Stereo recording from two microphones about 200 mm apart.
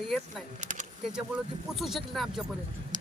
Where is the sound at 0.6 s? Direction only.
40° right (ahead or behind).